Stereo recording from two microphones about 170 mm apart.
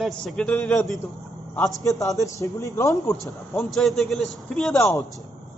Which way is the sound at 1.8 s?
20° left (ahead or behind).